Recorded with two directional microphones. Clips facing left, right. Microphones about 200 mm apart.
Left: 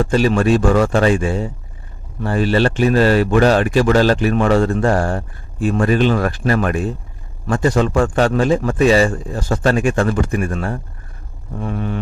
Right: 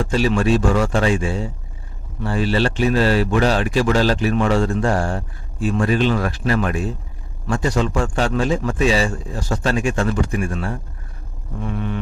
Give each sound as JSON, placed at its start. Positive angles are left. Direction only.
{"t": 0.1, "sound": "a man's voice", "side_deg": 50}
{"t": 11.6, "sound": "music", "side_deg": 40}